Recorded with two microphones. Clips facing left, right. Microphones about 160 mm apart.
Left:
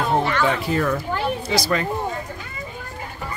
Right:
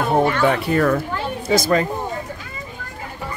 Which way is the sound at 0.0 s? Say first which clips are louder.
Right 3 dB; 50° right (ahead or behind).